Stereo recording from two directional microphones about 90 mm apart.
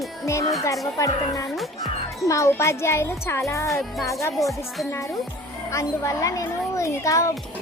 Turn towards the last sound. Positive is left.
turn(degrees=35)  # may be behind; listen again after turning